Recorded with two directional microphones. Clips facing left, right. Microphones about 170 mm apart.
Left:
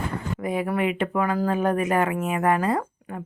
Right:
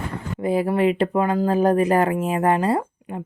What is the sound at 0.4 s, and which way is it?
Speech, 30° right (ahead or behind).